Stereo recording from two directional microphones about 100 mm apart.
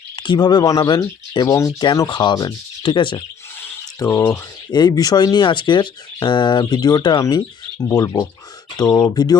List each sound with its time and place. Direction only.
0.2 s speech: 50° left (ahead or behind)
0.6 s speech: 35° left (ahead or behind); by 3.2 s 50° left (ahead or behind)
3.6 s a sound: 30° left (ahead or behind)
4.3 s speech: 45° left (ahead or behind)